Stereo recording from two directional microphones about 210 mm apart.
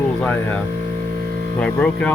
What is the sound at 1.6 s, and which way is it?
Speech, 5° left (ahead or behind).